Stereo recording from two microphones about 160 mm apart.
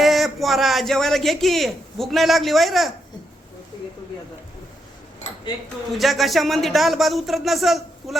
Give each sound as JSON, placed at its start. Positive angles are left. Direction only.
{"t": 0.0, "sound": "a man's voice", "side_deg": 0}
{"t": 5.2, "sound": "dishes", "side_deg": 45}
{"t": 6.0, "sound": "speech", "side_deg": 0}